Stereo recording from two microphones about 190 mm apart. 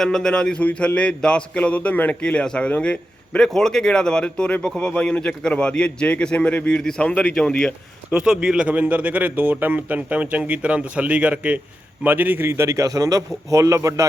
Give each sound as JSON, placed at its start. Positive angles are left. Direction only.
{"t": 0.0, "sound": "speech", "side_deg": 5}